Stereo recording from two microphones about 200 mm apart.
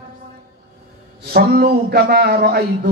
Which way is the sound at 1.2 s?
50° right (ahead or behind).